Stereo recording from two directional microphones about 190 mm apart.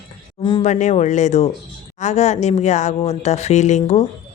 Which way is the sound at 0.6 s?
40° left (ahead or behind).